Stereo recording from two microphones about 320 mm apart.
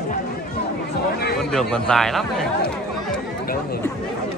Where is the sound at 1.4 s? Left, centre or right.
Centre.